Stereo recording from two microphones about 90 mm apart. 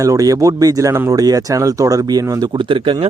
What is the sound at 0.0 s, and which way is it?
Speech, 40° right (ahead or behind).